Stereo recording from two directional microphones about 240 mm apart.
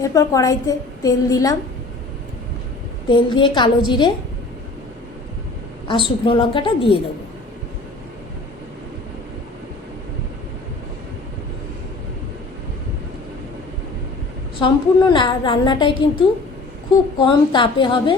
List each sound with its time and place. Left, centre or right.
0.0 s a woman's voice: centre
3.1 s a woman's voice: centre
5.9 s a woman's voice: left
14.6 s a woman's voice: centre
17.2 s a woman's voice: centre